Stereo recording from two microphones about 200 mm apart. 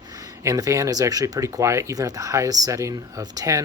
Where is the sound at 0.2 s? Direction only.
15° right (ahead or behind).